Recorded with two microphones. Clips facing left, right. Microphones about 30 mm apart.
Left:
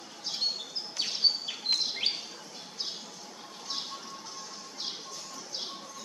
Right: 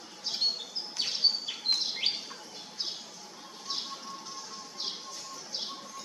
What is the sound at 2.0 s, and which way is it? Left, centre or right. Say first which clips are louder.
Bird: even; centre.